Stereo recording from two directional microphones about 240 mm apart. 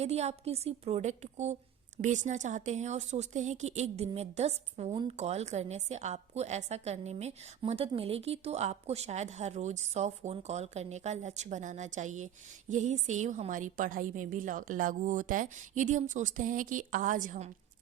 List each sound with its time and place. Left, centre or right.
0.0 s speech: right